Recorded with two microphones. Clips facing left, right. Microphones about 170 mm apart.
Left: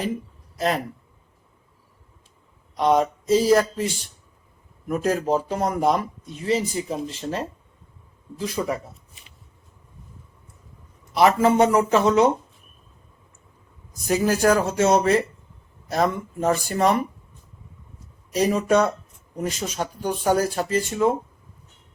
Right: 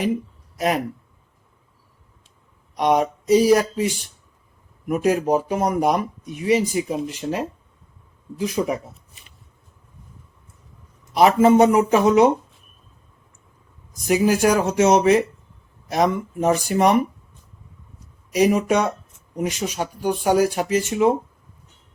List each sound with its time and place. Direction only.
2.7 s speech: 15° right (ahead or behind)
4.9 s speech: 10° right (ahead or behind)
11.2 s speech: 20° right (ahead or behind)
14.1 s speech: 15° right (ahead or behind)
18.3 s speech: 10° right (ahead or behind)